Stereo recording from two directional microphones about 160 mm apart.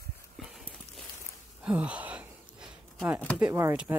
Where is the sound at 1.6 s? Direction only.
5° right (ahead or behind).